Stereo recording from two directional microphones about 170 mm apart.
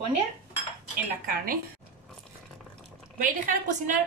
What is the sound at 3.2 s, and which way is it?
Speech, 55° right (ahead or behind).